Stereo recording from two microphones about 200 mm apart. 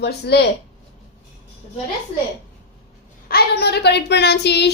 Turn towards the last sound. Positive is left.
turn(degrees=55)  # may be behind; listen again after turning